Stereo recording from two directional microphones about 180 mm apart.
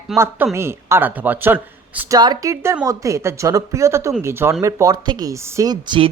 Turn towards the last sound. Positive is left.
turn(degrees=-25)  # may be behind; listen again after turning